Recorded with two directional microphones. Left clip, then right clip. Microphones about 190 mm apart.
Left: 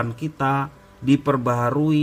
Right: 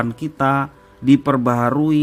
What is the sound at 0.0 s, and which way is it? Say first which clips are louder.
A man's voice: right 4 dB; 35° right (ahead or behind).